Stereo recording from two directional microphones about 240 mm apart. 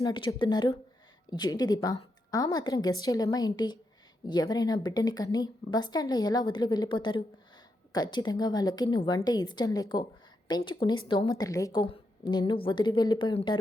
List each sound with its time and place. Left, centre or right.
0.0 s a woman's voice: centre